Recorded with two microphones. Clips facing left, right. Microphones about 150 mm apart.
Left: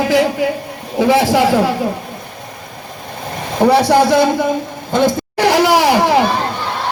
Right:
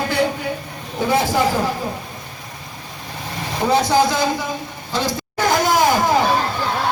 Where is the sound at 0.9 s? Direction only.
90° left.